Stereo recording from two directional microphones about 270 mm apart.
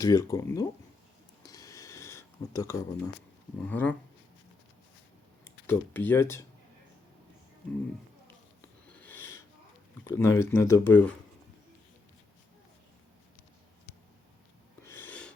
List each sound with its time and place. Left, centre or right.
0.0 s speech: centre
1.5 s a sound: centre
3.6 s speech: centre
5.5 s speech: centre
8.6 s a sound: centre
10.0 s speech: centre
14.8 s snort: centre